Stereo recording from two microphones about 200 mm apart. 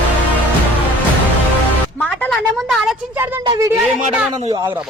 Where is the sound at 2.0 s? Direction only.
Centre (ahead or behind).